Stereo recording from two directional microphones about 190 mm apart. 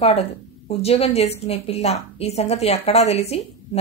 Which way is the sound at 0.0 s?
30° left (ahead or behind).